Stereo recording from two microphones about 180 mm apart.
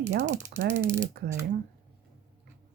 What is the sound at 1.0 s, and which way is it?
Speech, 60° right (ahead or behind).